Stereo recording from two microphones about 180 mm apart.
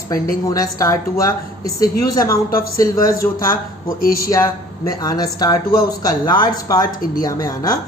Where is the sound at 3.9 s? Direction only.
55° left (ahead or behind).